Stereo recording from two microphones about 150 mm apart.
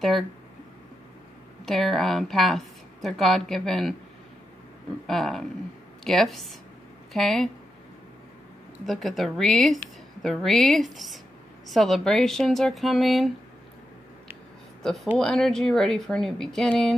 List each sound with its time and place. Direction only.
1.7 s a woman's voice: centre (ahead or behind)
5.0 s a woman's voice: centre (ahead or behind)
8.8 s a woman's voice: centre (ahead or behind)
15.1 s a woman's voice: 5° left (ahead or behind)